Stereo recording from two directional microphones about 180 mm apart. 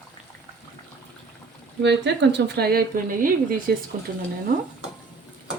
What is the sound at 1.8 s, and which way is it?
Speech, 75° right (ahead or behind).